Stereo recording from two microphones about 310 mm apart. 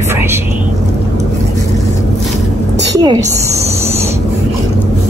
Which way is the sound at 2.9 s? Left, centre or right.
Centre.